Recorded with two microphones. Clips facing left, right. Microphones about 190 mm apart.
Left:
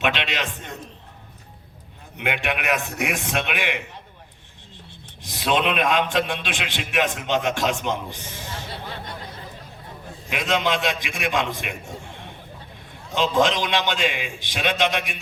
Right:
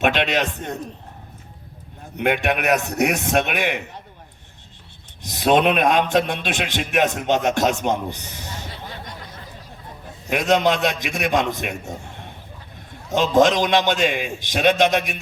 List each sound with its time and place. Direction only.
0.0 s a man's voice: 45° right (ahead or behind)
2.1 s a man's voice: 45° right (ahead or behind)
5.2 s a man's voice: 45° right (ahead or behind)
10.2 s a man's voice: 45° right (ahead or behind)
13.1 s a man's voice: 45° right (ahead or behind)